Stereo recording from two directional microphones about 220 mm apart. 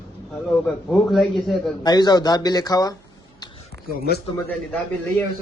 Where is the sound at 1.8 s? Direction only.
20° left (ahead or behind).